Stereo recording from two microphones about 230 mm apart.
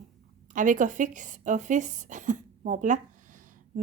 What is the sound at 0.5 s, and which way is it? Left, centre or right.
A woman's voice, right.